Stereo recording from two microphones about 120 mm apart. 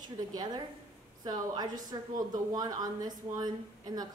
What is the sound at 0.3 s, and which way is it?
A woman's voice, 35° right (ahead or behind).